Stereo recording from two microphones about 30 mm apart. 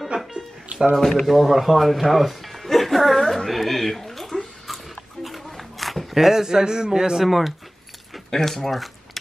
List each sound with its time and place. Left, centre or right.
0.9 s speech: centre
1.2 s speech: centre
3.2 s a sound: centre
6.1 s a man's voice: centre
7.2 s speech: centre
8.3 s speech: centre